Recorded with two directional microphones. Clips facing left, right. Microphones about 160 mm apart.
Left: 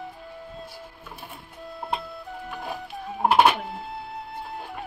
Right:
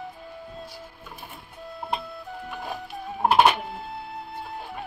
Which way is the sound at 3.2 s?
Centre (ahead or behind).